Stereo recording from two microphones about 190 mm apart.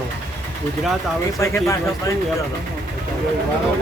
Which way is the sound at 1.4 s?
15° left (ahead or behind).